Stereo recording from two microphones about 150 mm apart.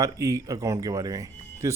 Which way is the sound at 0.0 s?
20° right (ahead or behind).